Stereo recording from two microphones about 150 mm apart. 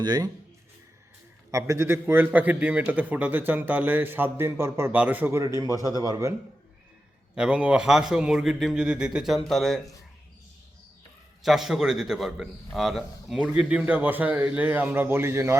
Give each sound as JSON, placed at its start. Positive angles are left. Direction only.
{"t": 0.0, "sound": "speech", "side_deg": -25}
{"t": 1.5, "sound": "a man's voice", "side_deg": -20}
{"t": 7.3, "sound": "a man's voice", "side_deg": -5}
{"t": 11.4, "sound": "a man's voice", "side_deg": 0}